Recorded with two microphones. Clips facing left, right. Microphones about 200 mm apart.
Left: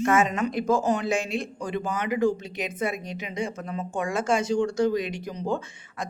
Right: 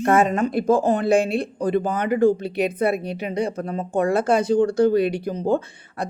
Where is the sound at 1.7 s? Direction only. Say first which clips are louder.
Right 6 dB; 55° right (ahead or behind).